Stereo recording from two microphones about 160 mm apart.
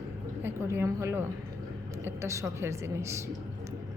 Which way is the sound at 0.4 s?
15° right (ahead or behind).